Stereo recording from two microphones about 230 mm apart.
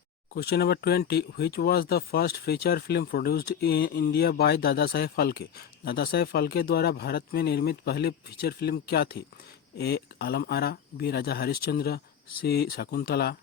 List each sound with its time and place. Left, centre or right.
0.3 s speech: left